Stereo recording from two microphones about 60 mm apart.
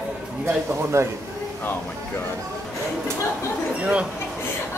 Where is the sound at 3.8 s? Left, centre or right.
Centre.